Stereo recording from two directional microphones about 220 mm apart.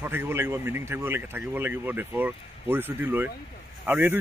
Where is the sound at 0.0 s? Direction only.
10° right (ahead or behind).